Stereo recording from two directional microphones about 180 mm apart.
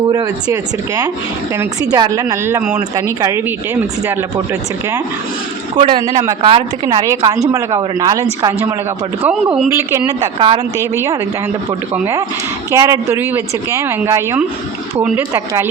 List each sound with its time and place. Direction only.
0.1 s a woman's voice: 20° right (ahead or behind)
5.7 s speech: 25° right (ahead or behind)
9.2 s a woman's voice: 10° right (ahead or behind)
10.3 s speech: 30° right (ahead or behind)
10.8 s a woman's voice: 15° right (ahead or behind)